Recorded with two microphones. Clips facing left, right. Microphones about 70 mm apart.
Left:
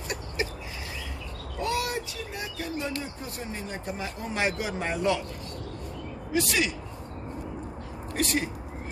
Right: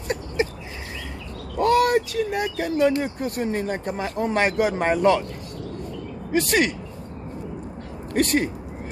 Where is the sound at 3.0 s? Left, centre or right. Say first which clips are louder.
Right 11 dB; right.